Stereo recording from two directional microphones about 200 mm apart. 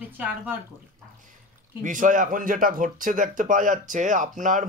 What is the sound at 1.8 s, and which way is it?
Speech, 40° right (ahead or behind).